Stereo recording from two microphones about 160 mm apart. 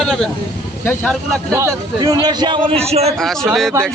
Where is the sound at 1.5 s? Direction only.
15° right (ahead or behind); by 3.1 s 40° right (ahead or behind).